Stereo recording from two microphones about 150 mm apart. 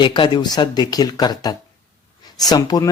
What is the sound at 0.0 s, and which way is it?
Speech, 30° left (ahead or behind).